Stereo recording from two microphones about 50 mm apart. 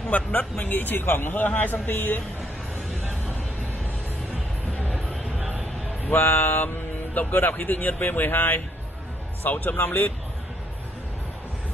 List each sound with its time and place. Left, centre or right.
0.1 s a man's voice: left
1.3 s a man's voice: left
6.0 s a man's voice: left